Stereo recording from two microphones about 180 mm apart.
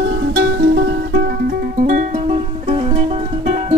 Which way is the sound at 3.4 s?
35° right (ahead or behind).